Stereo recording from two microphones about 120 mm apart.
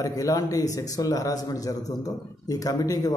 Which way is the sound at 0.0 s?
30° left (ahead or behind).